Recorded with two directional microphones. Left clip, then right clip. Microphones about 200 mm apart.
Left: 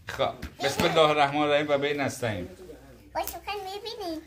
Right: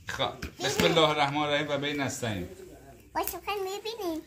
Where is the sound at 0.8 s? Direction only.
40° left (ahead or behind).